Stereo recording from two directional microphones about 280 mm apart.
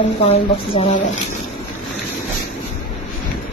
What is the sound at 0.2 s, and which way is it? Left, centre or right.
Speech, left.